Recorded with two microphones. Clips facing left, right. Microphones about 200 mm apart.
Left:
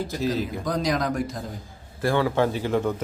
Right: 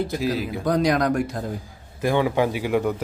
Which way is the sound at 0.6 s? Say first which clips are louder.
Right 7 dB; 60° right (ahead or behind).